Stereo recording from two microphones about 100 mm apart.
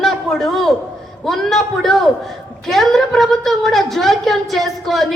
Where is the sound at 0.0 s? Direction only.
Centre (ahead or behind).